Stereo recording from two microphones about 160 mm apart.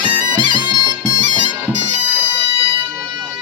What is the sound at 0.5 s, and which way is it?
Bagpipes, 25° right (ahead or behind).